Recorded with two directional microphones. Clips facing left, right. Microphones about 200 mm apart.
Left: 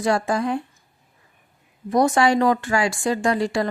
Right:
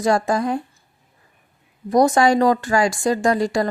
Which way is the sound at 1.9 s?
40° right (ahead or behind).